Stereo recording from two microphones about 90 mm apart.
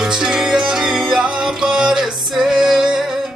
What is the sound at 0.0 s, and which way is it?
Music, 5° right (ahead or behind).